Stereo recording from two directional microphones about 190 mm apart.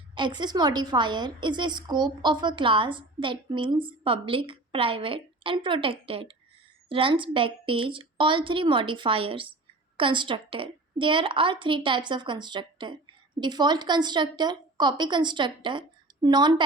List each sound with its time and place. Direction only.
0.1 s a woman's voice: 25° right (ahead or behind)